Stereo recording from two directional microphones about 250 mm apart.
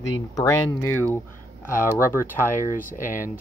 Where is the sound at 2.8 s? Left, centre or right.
Left.